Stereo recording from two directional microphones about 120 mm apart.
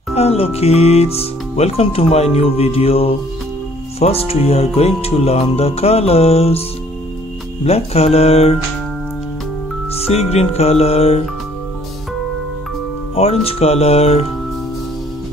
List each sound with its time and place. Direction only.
0.1 s speech: 60° left (ahead or behind)
7.6 s speech: 60° left (ahead or behind)
9.9 s speech: 60° left (ahead or behind)
13.1 s speech: 60° left (ahead or behind)